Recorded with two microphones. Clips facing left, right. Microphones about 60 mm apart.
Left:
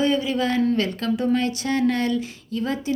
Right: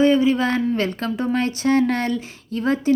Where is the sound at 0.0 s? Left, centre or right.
Right.